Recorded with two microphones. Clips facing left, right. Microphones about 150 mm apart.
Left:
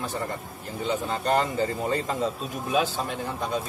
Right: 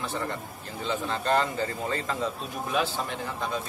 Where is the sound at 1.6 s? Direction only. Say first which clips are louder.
Left 4 dB; 20° left (ahead or behind).